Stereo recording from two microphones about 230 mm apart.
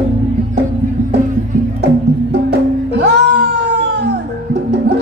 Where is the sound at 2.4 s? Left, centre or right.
Right.